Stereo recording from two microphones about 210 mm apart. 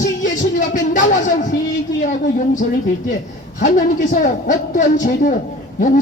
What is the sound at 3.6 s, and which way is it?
A man's voice, 40° left (ahead or behind).